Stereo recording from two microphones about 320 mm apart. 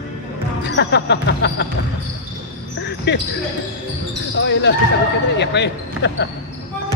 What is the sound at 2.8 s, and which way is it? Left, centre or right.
Basketball bounce, left.